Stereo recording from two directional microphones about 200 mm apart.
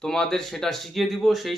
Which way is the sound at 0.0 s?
5° left (ahead or behind).